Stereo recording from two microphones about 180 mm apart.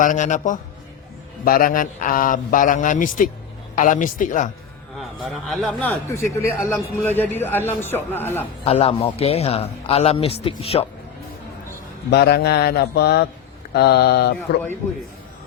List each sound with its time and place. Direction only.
0.0 s a man's voice: 45° left (ahead or behind)
4.9 s a man's voice: centre (ahead or behind)
8.6 s a man's voice: 35° left (ahead or behind)
12.1 s speech: 65° left (ahead or behind)